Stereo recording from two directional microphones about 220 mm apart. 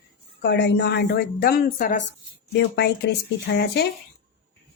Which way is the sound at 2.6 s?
50° left (ahead or behind).